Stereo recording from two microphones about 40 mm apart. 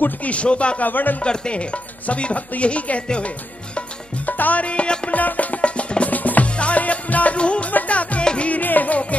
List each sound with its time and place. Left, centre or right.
0.0 s music: left
0.7 s speech: left
1.2 s speech: left
4.3 s music: left
5.1 s music: left
6.0 s music: left
8.2 s music: left
8.5 s music: left